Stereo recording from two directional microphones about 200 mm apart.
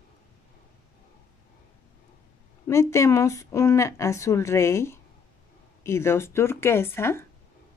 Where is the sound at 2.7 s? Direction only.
15° left (ahead or behind).